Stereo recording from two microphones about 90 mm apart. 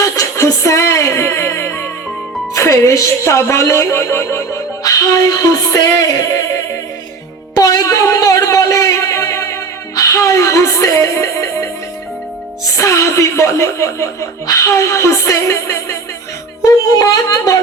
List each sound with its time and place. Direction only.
0.0 s music: 35° left (ahead or behind)
2.6 s speech: 35° left (ahead or behind)
4.8 s music: 40° left (ahead or behind)
7.5 s a sound: 45° left (ahead or behind)
12.6 s speech: 35° left (ahead or behind)
16.6 s a sound: 40° left (ahead or behind)